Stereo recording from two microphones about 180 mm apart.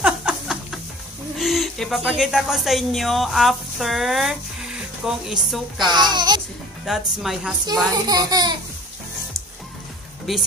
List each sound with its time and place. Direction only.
0.0 s music: 5° right (ahead or behind)
1.4 s speech: centre (ahead or behind)
5.8 s a child's voice: 25° right (ahead or behind)
6.9 s speech: centre (ahead or behind)
7.6 s a child's voice: 20° right (ahead or behind)
10.3 s speech: centre (ahead or behind)